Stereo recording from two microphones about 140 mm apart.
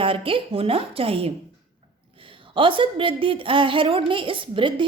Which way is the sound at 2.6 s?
40° right (ahead or behind).